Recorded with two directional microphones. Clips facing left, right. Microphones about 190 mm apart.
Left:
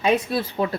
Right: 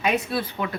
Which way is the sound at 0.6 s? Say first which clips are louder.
Left 5 dB; 35° left (ahead or behind).